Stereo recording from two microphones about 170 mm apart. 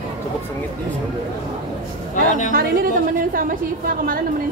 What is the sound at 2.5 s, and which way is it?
Speech, 60° right (ahead or behind).